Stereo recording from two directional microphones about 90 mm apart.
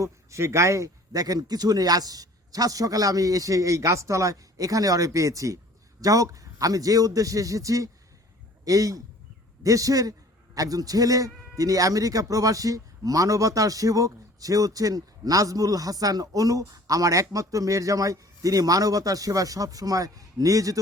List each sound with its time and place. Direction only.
0.0 s a man's voice: 35° right (ahead or behind)